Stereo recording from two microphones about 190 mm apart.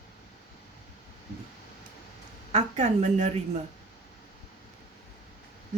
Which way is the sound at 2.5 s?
35° right (ahead or behind).